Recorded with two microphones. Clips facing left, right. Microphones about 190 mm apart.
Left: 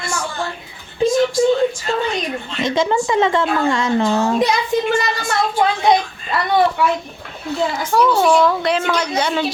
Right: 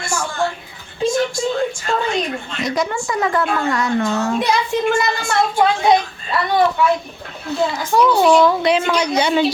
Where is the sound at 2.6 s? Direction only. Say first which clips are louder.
Left 4 dB; 25° left (ahead or behind).